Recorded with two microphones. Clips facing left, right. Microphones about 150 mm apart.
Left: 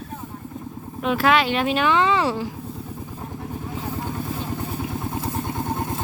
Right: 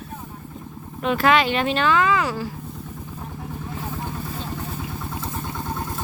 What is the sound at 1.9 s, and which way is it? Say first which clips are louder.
Speech: even; 25° left (ahead or behind).